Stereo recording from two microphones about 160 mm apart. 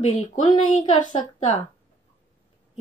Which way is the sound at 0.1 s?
45° left (ahead or behind).